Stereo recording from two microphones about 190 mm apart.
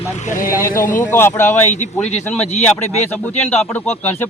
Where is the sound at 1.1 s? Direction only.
10° left (ahead or behind).